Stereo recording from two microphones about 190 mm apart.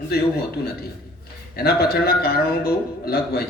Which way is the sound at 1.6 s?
55° left (ahead or behind).